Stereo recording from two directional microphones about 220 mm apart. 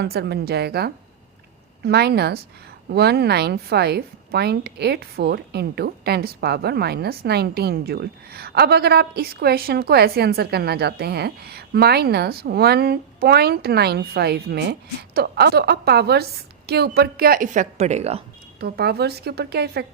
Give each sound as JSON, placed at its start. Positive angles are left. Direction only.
{"t": 0.0, "sound": "a woman's voice", "side_deg": -50}
{"t": 18.6, "sound": "a woman's voice", "side_deg": -45}